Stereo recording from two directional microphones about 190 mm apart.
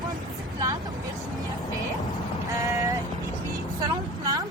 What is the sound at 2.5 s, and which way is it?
Vehicle, 15° right (ahead or behind).